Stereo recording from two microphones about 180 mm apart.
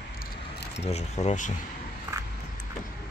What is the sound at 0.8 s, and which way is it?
Speech, 35° left (ahead or behind).